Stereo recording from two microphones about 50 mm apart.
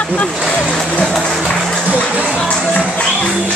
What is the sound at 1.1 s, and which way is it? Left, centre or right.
Music, centre.